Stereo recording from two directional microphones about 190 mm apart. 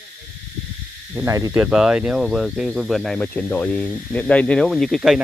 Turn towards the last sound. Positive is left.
turn(degrees=0)  # may be behind; listen again after turning